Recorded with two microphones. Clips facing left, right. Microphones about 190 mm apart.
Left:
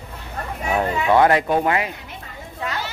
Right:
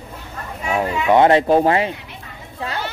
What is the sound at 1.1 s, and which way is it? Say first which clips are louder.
Speech: right 4 dB; 25° right (ahead or behind).